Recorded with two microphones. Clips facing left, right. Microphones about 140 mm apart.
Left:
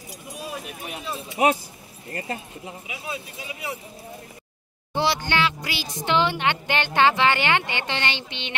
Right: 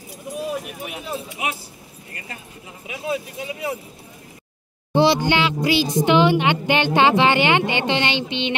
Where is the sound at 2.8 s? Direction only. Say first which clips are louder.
Right 11 dB; 50° right (ahead or behind).